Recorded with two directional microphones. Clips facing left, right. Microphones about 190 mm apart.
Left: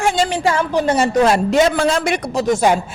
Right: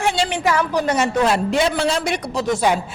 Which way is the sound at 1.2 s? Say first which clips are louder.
Left 6 dB; 40° left (ahead or behind).